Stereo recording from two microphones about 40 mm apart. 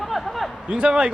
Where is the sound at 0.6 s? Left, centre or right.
Right.